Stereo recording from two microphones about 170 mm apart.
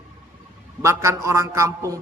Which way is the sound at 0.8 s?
15° right (ahead or behind).